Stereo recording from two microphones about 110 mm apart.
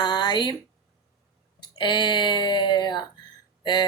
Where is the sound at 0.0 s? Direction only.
40° left (ahead or behind).